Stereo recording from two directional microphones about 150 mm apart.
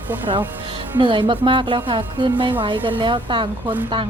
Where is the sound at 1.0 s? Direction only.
35° right (ahead or behind).